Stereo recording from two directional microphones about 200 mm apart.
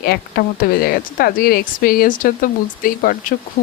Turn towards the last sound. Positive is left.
turn(degrees=45)  # may be behind; listen again after turning